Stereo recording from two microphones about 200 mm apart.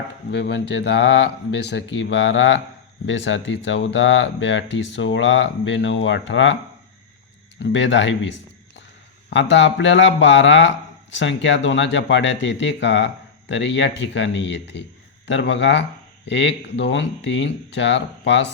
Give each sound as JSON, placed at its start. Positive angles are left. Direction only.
{"t": 0.3, "sound": "speech", "side_deg": 60}
{"t": 7.6, "sound": "a man's voice", "side_deg": 65}